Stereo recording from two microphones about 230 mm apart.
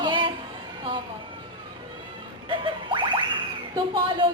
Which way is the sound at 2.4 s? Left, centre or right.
Right.